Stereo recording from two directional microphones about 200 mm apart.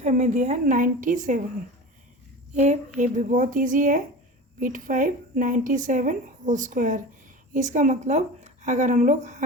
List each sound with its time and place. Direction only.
0.0 s a woman's voice: 40° right (ahead or behind)
2.6 s a woman's voice: 35° right (ahead or behind)